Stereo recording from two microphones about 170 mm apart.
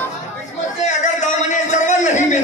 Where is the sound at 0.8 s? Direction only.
45° left (ahead or behind).